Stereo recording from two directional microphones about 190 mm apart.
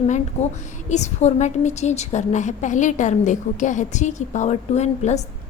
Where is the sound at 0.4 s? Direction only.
35° left (ahead or behind).